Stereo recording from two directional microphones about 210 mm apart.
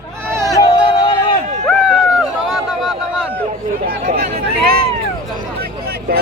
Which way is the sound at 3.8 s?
45° right (ahead or behind).